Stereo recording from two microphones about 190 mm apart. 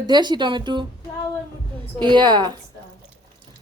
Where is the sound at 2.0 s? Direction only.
25° right (ahead or behind).